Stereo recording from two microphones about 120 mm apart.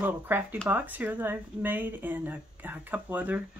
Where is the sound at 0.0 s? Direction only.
15° right (ahead or behind).